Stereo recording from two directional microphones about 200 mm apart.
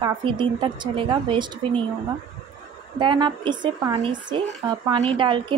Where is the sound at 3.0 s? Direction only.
25° right (ahead or behind).